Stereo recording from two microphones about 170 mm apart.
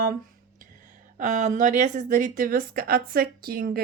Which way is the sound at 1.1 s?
45° right (ahead or behind).